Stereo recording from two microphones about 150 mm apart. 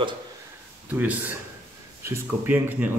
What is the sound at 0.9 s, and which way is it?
A man's voice, 10° right (ahead or behind).